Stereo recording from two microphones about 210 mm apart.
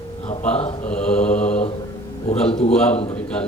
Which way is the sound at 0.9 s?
5° left (ahead or behind).